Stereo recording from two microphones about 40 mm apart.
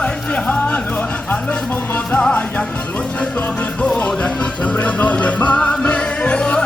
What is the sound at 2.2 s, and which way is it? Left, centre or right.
Music, left.